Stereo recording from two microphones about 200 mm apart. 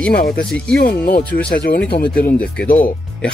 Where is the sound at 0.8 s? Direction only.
50° left (ahead or behind).